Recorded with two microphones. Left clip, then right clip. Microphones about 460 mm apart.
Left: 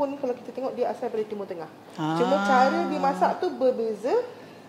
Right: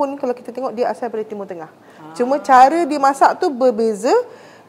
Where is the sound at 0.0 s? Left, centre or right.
Right.